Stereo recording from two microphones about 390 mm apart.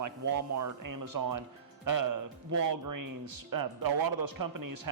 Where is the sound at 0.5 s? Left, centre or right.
Right.